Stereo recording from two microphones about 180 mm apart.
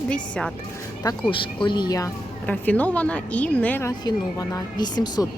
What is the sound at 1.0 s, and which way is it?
Speech, 25° left (ahead or behind).